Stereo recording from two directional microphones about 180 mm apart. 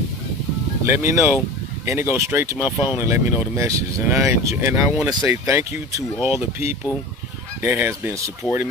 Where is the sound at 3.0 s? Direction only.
15° right (ahead or behind).